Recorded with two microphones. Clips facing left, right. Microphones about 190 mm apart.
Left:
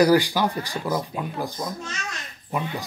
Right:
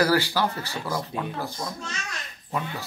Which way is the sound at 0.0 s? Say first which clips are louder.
Left 4 dB; 15° left (ahead or behind).